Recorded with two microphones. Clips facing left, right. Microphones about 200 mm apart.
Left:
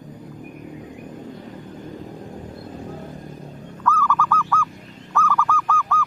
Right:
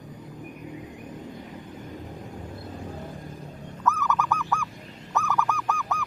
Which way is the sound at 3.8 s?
20° right (ahead or behind).